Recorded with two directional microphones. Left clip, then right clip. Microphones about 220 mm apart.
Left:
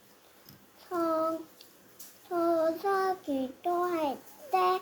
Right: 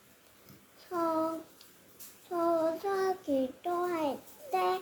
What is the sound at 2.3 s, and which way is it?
Child singing, 15° left (ahead or behind).